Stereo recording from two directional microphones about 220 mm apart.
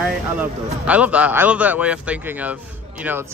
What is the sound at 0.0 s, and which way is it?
A man's voice, 5° right (ahead or behind).